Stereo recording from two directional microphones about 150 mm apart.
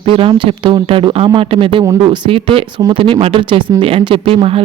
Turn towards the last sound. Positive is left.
turn(degrees=-40)  # may be behind; listen again after turning